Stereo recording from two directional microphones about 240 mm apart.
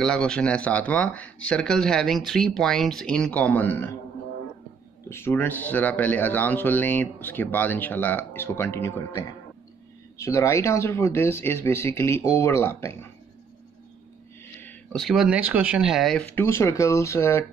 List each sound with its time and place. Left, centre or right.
0.0 s speech: centre
5.1 s speech: centre
14.6 s speech: centre